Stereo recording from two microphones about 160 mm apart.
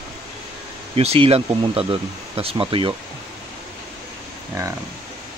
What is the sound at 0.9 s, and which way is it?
Speech, 40° right (ahead or behind).